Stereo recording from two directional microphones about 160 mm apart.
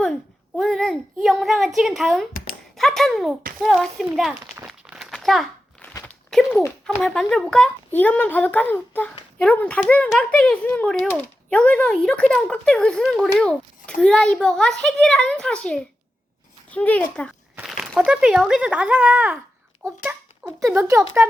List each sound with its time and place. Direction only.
0.0 s a sound: 5° left (ahead or behind)
2.7 s a child's voice: centre (ahead or behind)
3.6 s a sound: centre (ahead or behind)
6.8 s a child's voice: 5° left (ahead or behind)
17.6 s speech: 5° right (ahead or behind)
20.7 s speech: 15° right (ahead or behind)